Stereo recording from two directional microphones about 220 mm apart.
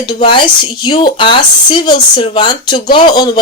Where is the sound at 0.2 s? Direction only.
20° left (ahead or behind).